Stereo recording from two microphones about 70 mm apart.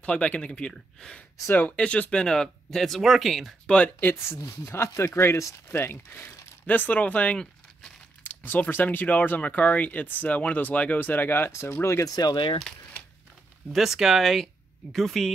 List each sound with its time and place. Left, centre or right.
0.0 s speech: centre
1.5 s speech: left
1.8 s speech: centre
3.7 s speech: left
5.7 s a sound: left; by 8.4 s centre
8.4 s speech: left
11.5 s speech: left
12.2 s speech: left
13.7 s speech: centre